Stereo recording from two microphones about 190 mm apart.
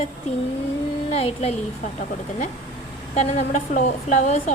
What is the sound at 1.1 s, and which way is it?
Speech, 30° left (ahead or behind).